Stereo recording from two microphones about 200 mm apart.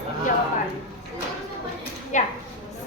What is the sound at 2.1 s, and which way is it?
Speech, 40° left (ahead or behind).